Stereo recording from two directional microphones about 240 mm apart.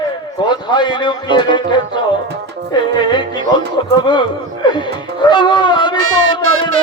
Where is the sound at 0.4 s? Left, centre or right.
Centre.